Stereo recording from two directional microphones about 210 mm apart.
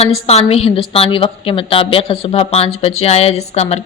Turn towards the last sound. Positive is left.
turn(degrees=30)  # may be behind; listen again after turning